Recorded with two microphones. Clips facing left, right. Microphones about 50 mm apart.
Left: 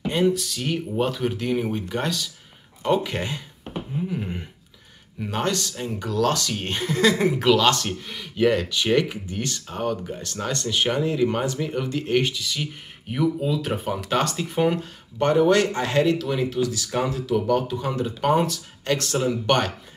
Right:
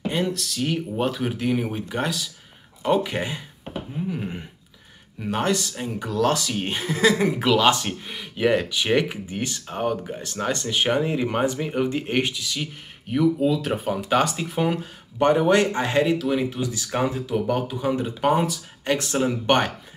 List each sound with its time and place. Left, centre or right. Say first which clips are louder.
0.0 s speech: left 4 dB; centre
15.1 s speech: even; centre
18.9 s speech: right 1 dB; centre